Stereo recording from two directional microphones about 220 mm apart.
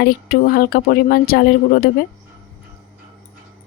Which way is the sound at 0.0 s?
45° left (ahead or behind).